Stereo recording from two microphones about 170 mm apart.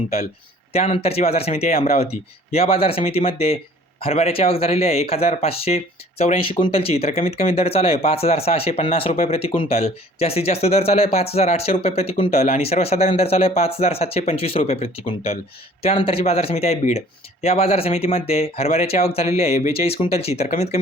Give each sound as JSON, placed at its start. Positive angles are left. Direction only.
{"t": 0.7, "sound": "speech", "side_deg": 35}